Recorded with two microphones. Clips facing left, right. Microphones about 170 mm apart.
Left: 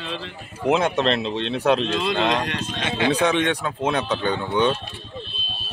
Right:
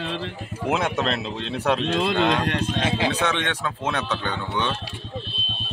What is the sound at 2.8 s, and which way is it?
Speech, 30° right (ahead or behind).